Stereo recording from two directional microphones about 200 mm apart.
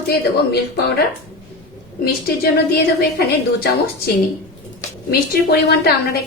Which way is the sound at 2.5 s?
55° left (ahead or behind).